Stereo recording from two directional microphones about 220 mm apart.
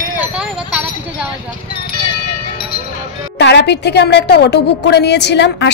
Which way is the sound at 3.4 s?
50° left (ahead or behind).